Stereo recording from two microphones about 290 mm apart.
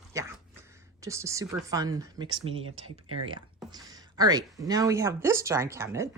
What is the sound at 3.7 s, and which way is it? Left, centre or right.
Speech, centre.